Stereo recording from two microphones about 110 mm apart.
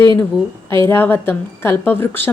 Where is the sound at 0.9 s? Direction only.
20° left (ahead or behind).